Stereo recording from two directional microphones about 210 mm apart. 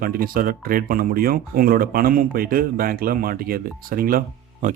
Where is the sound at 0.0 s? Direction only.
40° right (ahead or behind).